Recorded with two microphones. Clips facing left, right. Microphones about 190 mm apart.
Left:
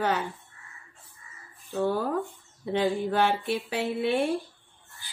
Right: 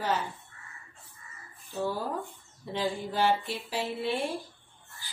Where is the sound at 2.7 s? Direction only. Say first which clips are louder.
Left 6 dB; 60° left (ahead or behind).